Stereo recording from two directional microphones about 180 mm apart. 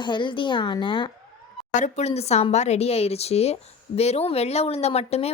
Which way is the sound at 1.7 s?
40° left (ahead or behind).